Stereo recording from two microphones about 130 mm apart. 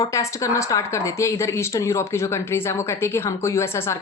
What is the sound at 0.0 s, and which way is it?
Speech, 25° left (ahead or behind).